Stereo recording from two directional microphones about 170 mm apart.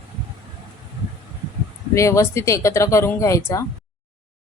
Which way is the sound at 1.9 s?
15° left (ahead or behind).